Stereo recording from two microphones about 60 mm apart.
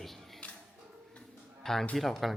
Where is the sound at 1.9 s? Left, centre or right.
Centre.